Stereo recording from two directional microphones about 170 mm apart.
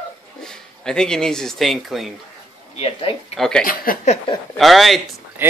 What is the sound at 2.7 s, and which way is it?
Speech, 35° left (ahead or behind).